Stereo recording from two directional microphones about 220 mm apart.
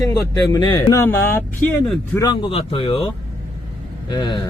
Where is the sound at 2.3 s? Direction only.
20° left (ahead or behind).